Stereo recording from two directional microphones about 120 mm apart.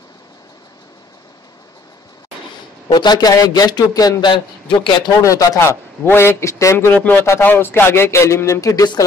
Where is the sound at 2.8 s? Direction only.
35° left (ahead or behind).